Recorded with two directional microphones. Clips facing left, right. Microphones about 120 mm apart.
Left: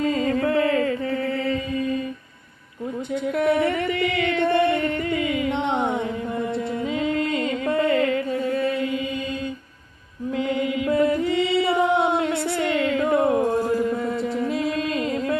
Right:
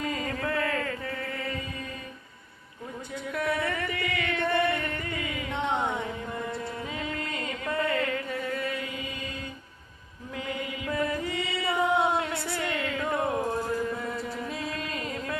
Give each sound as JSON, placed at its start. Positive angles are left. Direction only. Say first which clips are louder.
{"t": 0.0, "sound": "music", "louder": "left 10 dB", "side_deg": 25}
{"t": 3.3, "sound": "singing", "louder": "left 8 dB", "side_deg": 25}
{"t": 5.2, "sound": "music", "louder": "left 8 dB", "side_deg": 20}
{"t": 8.5, "sound": "chant", "louder": "left 9 dB", "side_deg": 30}
{"t": 10.3, "sound": "mantra", "louder": "left 10 dB", "side_deg": 30}
{"t": 13.9, "sound": "music", "louder": "left 8 dB", "side_deg": 25}